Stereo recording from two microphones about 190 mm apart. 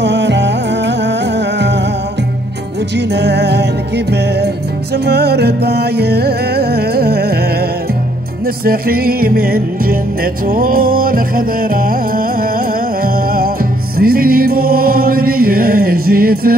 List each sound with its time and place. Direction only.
0.0 s music: 65° right (ahead or behind)
3.0 s music: 60° right (ahead or behind)
8.6 s music: 50° right (ahead or behind)